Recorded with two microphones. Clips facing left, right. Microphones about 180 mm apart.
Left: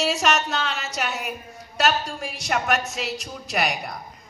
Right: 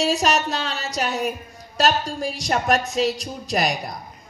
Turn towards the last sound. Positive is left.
turn(degrees=-35)  # may be behind; listen again after turning